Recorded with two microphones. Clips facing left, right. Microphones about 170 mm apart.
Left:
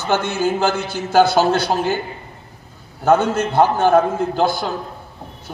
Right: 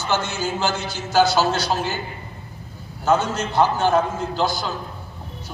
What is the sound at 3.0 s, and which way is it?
A man's voice, 55° left (ahead or behind).